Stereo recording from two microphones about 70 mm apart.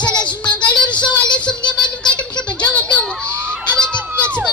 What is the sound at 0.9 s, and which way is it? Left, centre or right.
Child singing, left.